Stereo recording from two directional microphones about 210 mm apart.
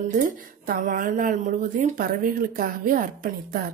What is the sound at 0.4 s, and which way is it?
A woman's voice, 40° right (ahead or behind).